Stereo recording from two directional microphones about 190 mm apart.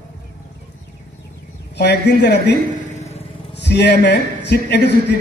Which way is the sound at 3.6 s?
60° left (ahead or behind).